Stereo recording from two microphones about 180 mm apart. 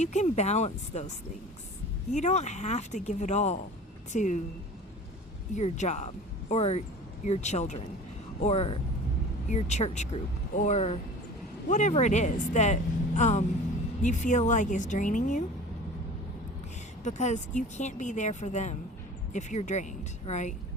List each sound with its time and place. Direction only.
0.0 s speech: 40° left (ahead or behind)
2.1 s speech: 40° left (ahead or behind)
5.5 s speech: 40° left (ahead or behind)
17.0 s speech: 40° left (ahead or behind)